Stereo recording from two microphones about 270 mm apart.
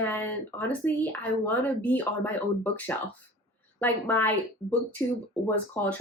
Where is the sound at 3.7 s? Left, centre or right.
Centre.